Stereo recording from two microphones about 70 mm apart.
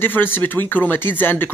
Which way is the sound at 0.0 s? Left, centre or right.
Left.